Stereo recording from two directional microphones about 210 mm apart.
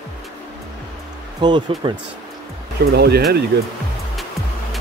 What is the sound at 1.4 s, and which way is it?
Speech, 20° right (ahead or behind).